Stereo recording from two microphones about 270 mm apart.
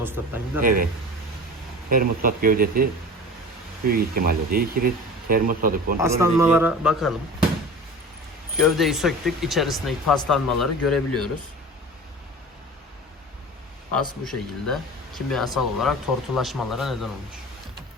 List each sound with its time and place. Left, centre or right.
0.0 s speech: centre
0.6 s speech: right
1.9 s speech: right
3.8 s speech: right
6.0 s speech: centre
8.5 s speech: centre
14.3 s speech: centre